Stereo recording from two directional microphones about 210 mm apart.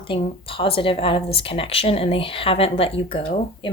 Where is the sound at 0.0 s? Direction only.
25° left (ahead or behind).